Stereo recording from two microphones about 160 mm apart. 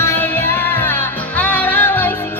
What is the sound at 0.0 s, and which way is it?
Music, 15° left (ahead or behind).